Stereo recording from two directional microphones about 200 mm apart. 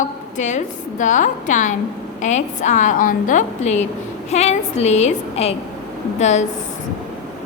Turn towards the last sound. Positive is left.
turn(degrees=35)  # may be behind; listen again after turning